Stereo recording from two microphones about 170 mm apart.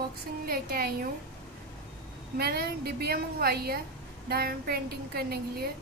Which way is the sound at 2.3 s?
65° right (ahead or behind).